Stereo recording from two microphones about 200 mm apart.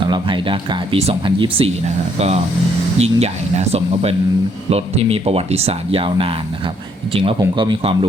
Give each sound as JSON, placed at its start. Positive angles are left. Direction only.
{"t": 0.0, "sound": "speech", "side_deg": -25}